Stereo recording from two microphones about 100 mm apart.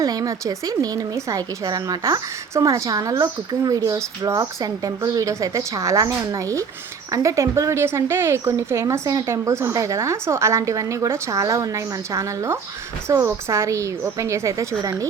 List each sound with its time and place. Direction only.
0.0 s speech: 35° right (ahead or behind)